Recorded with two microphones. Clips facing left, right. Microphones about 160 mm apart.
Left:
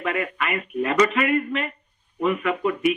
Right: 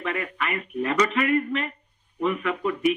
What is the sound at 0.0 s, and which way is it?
Speech, 65° left (ahead or behind).